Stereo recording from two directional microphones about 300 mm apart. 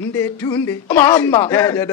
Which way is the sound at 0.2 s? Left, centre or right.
Centre.